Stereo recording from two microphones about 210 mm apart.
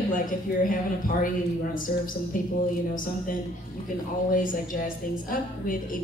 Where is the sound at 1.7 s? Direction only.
40° left (ahead or behind).